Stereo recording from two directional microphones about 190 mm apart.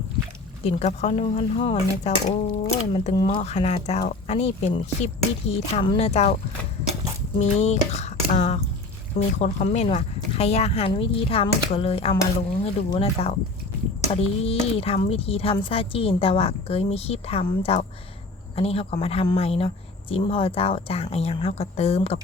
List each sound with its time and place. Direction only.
0.6 s speech: 35° left (ahead or behind)
7.3 s speech: 35° left (ahead or behind)